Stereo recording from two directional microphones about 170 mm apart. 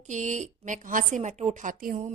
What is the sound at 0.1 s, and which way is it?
Speech, 45° right (ahead or behind).